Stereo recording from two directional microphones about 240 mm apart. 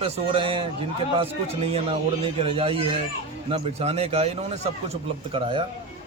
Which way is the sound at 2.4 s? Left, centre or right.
Right.